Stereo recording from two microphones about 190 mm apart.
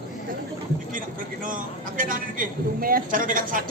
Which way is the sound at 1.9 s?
45° right (ahead or behind).